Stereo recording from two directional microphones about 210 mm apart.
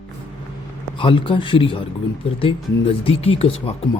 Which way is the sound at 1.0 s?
25° left (ahead or behind).